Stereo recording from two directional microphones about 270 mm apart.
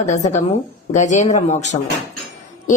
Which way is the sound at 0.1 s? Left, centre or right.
Left.